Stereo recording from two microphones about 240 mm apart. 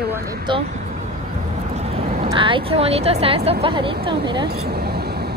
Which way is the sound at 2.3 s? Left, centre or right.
Right.